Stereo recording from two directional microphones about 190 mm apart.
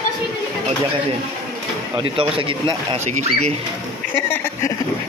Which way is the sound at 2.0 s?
25° right (ahead or behind).